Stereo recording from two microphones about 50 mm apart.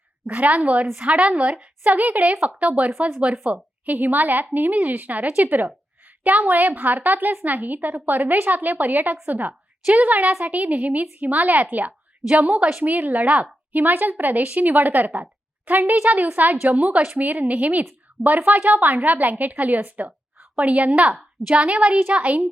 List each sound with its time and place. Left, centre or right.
0.3 s a woman's voice: right
1.8 s a woman's voice: right